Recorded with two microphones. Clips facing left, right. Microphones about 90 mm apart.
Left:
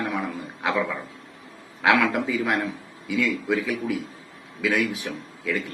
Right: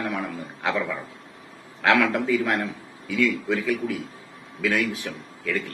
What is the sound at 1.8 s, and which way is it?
A man's voice, 15° left (ahead or behind).